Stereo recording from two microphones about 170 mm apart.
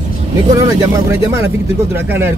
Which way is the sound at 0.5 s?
20° right (ahead or behind).